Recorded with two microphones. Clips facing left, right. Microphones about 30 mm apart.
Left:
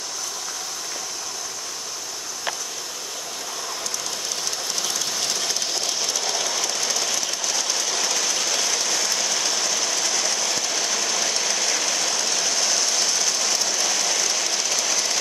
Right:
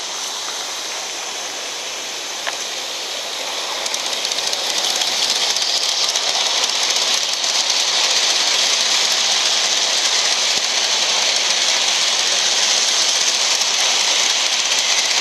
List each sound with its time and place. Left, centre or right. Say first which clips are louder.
4.4 s train: right 7 dB; right